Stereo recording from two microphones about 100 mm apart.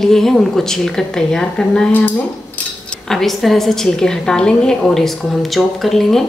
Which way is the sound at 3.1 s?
5° left (ahead or behind).